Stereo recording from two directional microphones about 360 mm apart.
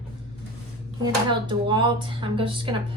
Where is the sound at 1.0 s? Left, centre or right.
Centre.